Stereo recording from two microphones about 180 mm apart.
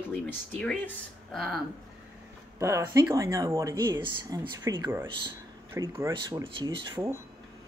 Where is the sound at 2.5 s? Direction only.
15° right (ahead or behind).